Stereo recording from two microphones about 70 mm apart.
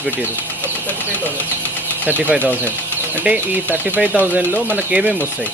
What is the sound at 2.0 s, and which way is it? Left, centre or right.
Speech, right.